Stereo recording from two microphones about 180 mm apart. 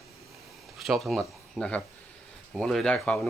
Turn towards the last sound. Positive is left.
turn(degrees=5)  # may be behind; listen again after turning